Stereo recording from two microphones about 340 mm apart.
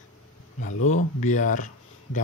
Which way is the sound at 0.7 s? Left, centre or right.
Left.